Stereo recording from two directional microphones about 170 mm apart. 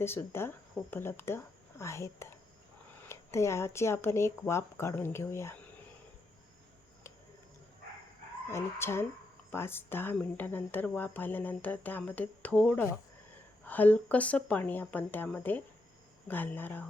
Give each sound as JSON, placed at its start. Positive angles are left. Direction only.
{"t": 0.0, "sound": "speech", "side_deg": 15}
{"t": 8.4, "sound": "speech", "side_deg": 15}